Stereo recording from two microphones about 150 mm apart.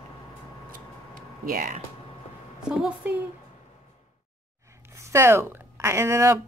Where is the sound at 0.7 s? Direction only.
65° right (ahead or behind).